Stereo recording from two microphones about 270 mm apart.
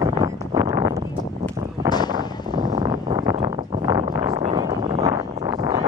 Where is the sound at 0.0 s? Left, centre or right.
Centre.